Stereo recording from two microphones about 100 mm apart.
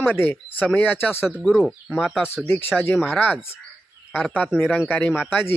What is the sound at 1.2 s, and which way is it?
Speech, 5° right (ahead or behind).